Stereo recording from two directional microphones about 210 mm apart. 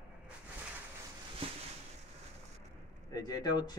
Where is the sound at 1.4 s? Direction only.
25° right (ahead or behind).